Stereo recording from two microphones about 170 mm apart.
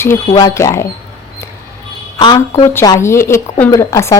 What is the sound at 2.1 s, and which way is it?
Speech, 20° left (ahead or behind).